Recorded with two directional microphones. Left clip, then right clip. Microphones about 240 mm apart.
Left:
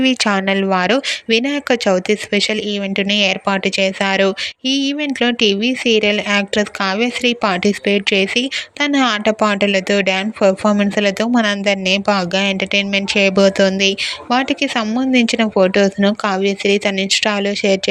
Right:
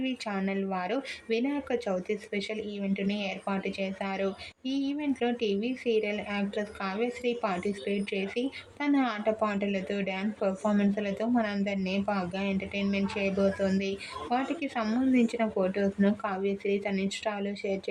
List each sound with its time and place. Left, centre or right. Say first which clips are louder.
0.3 s speech: left 17 dB; left